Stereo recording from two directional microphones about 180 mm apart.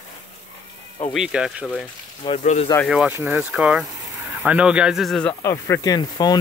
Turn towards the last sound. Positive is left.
turn(degrees=20)  # may be behind; listen again after turning